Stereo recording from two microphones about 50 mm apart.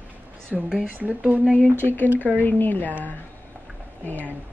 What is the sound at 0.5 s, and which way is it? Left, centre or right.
Speech, centre.